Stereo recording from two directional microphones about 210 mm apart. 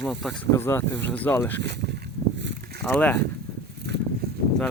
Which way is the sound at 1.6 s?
55° right (ahead or behind).